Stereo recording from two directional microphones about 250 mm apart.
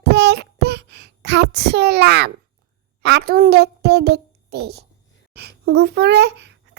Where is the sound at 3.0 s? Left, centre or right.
Right.